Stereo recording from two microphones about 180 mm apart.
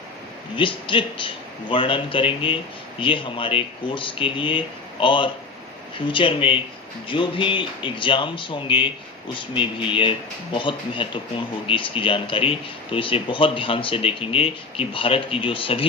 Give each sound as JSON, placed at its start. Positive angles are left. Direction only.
{"t": 0.5, "sound": "speech", "side_deg": 30}